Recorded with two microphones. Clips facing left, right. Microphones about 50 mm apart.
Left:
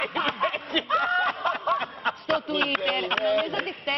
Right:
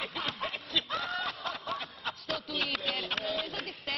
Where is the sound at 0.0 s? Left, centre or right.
Left.